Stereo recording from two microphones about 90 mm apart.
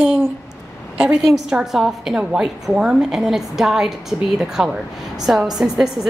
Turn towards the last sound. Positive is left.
turn(degrees=-5)  # may be behind; listen again after turning